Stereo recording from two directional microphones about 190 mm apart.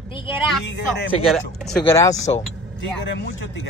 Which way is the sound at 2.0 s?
20° left (ahead or behind).